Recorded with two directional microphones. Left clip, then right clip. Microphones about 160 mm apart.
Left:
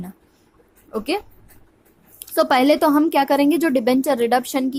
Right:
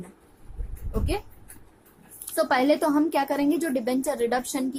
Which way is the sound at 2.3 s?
35° left (ahead or behind).